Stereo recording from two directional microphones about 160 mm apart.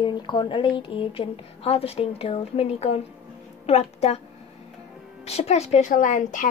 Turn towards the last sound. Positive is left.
turn(degrees=50)  # may be behind; listen again after turning